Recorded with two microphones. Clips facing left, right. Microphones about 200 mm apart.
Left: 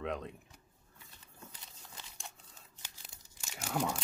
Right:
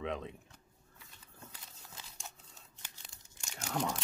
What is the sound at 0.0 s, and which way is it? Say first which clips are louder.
Speech: even; centre (ahead or behind).